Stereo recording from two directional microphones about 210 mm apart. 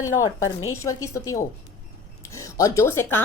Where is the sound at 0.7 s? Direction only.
15° left (ahead or behind).